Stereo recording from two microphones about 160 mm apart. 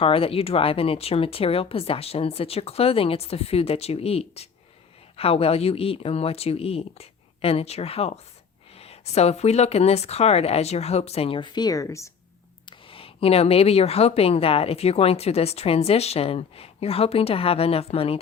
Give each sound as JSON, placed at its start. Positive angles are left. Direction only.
{"t": 0.0, "sound": "speech", "side_deg": 35}
{"t": 12.6, "sound": "speech", "side_deg": 35}